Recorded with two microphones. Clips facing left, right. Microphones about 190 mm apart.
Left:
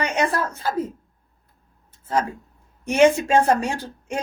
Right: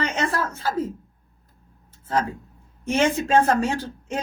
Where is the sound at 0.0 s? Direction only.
15° left (ahead or behind).